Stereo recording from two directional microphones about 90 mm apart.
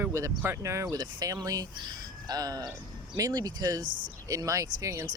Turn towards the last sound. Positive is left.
turn(degrees=-35)  # may be behind; listen again after turning